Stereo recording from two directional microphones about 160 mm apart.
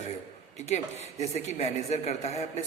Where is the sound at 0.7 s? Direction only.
45° left (ahead or behind).